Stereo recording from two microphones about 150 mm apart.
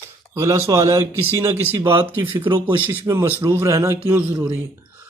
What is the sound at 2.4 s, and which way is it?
Speech, 30° right (ahead or behind).